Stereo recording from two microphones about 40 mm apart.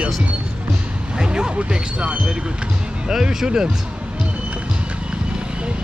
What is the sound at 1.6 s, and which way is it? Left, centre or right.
Speech, right.